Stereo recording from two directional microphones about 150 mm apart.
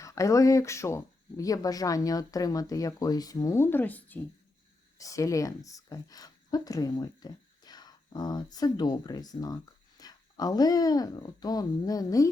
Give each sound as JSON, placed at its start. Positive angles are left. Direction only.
{"t": 0.0, "sound": "speech", "side_deg": 20}
{"t": 4.9, "sound": "speech", "side_deg": 20}